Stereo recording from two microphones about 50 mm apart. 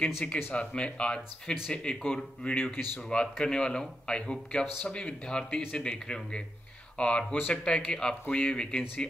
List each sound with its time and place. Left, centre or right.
0.0 s speech: left
2.5 s speech: left
3.1 s speech: centre